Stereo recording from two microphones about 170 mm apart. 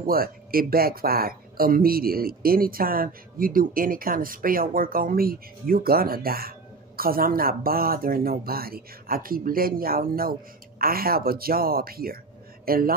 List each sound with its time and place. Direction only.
0.0 s speech: 60° right (ahead or behind)